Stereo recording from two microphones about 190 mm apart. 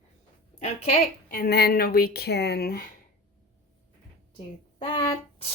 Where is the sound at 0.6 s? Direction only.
35° left (ahead or behind).